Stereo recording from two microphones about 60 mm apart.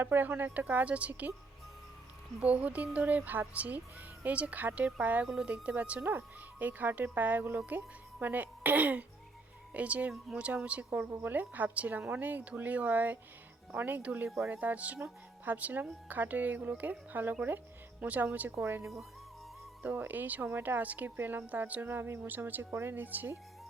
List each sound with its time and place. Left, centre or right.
0.0 s speech: right
2.4 s speech: right
6.0 s speech: right
18.5 s speech: right